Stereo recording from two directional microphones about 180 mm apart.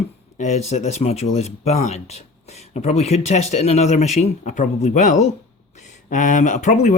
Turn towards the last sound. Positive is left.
turn(degrees=45)  # may be behind; listen again after turning